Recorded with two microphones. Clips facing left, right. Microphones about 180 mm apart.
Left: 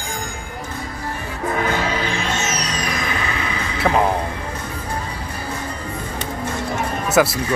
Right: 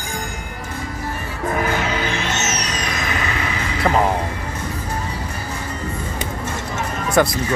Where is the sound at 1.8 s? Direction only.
30° left (ahead or behind).